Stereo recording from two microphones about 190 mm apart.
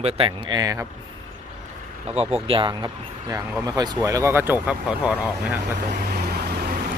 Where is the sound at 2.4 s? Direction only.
25° right (ahead or behind); by 5.6 s 5° right (ahead or behind).